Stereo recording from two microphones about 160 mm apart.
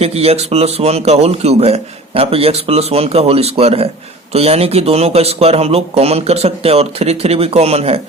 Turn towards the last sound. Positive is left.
turn(degrees=-40)  # may be behind; listen again after turning